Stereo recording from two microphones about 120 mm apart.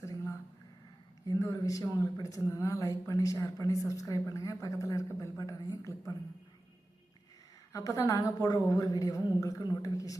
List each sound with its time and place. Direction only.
0.0 s a sound: 25° left (ahead or behind)
1.3 s speech: 30° left (ahead or behind)
7.7 s speech: 25° left (ahead or behind)